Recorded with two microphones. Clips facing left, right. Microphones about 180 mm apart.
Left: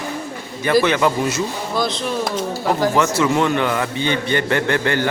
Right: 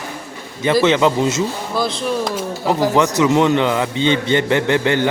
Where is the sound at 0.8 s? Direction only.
20° right (ahead or behind).